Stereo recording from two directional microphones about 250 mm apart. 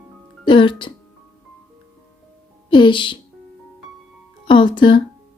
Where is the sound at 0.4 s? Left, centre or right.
Centre.